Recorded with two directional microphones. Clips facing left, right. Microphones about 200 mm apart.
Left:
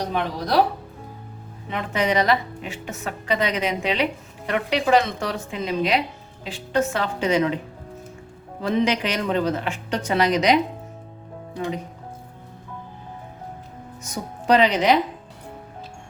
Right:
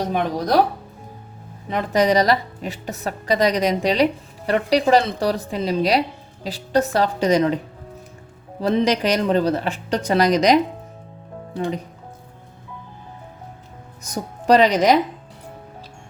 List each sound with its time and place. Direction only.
0.0 s speech: 45° right (ahead or behind)
1.7 s a woman's voice: 40° right (ahead or behind)
8.6 s a woman's voice: 40° right (ahead or behind)
14.1 s a woman's voice: 40° right (ahead or behind)